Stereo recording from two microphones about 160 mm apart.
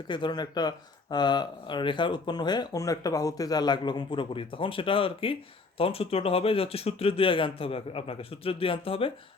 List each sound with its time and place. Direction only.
0.1 s speech: 30° left (ahead or behind)